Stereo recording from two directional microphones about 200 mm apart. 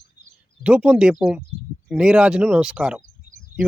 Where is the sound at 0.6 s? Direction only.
5° right (ahead or behind).